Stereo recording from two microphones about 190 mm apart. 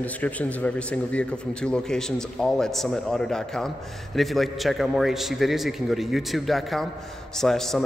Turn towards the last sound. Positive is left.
turn(degrees=0)  # may be behind; listen again after turning